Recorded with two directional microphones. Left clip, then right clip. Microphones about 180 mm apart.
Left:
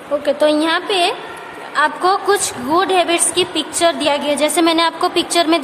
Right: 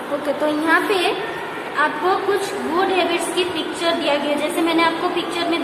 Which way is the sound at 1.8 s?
60° left (ahead or behind).